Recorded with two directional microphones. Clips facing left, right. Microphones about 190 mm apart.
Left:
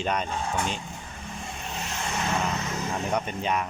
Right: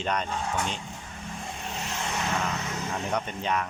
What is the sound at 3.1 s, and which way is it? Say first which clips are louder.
Speech: left 1 dB; 10° left (ahead or behind).